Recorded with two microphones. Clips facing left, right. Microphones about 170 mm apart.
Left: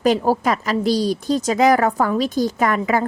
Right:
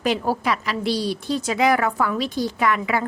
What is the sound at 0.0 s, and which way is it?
A woman's voice, 40° left (ahead or behind).